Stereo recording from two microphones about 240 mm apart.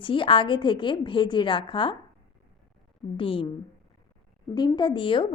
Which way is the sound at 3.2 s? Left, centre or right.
Left.